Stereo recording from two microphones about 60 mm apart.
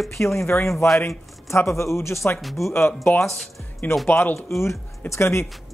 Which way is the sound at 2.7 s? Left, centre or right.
Left.